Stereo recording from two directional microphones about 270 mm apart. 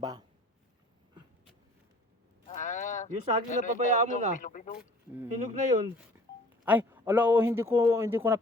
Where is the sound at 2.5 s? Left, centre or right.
Left.